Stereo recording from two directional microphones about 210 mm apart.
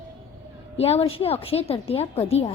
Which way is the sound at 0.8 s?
30° left (ahead or behind).